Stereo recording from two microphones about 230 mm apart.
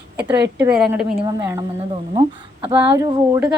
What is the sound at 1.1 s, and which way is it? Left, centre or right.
A woman's voice, centre.